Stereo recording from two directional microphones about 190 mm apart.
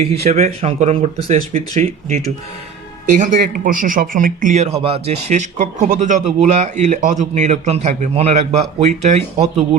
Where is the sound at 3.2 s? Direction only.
45° right (ahead or behind).